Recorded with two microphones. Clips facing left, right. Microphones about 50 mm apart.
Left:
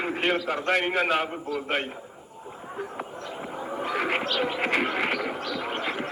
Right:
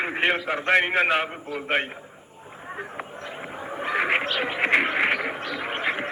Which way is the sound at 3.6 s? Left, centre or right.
Right.